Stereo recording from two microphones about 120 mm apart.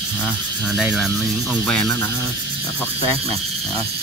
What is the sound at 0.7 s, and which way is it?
Speech, centre (ahead or behind).